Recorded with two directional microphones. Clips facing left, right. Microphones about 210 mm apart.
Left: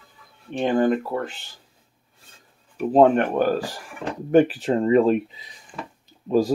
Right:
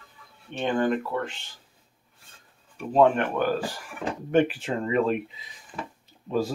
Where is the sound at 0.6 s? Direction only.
35° left (ahead or behind).